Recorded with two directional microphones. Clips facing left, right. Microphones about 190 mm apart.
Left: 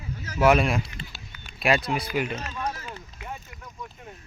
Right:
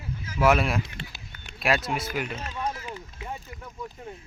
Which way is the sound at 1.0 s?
70° right (ahead or behind).